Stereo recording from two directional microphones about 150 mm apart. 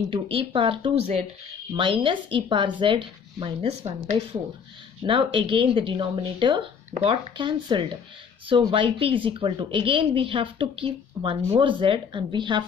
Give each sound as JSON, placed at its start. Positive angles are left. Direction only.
{"t": 0.1, "sound": "speech", "side_deg": -35}